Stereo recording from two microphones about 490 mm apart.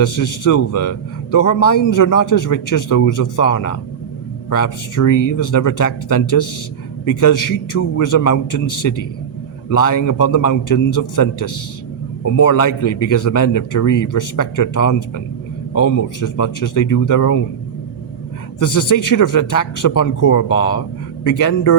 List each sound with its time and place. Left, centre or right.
0.0 s a man's voice: left
18.6 s a man's voice: left